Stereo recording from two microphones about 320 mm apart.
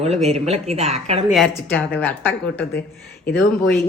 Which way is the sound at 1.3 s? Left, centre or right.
Centre.